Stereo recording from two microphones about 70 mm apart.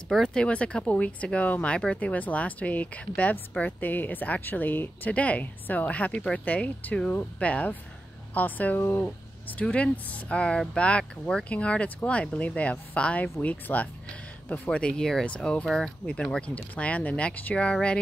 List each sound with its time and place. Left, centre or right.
0.1 s speech: centre